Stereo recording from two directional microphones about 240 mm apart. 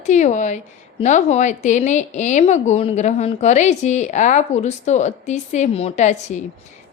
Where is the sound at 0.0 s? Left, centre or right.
Left.